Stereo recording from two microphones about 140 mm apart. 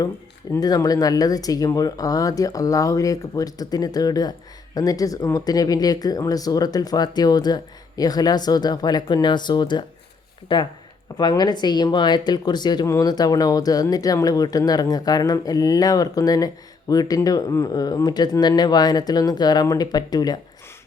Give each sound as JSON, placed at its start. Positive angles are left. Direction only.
{"t": 0.5, "sound": "speech", "side_deg": 25}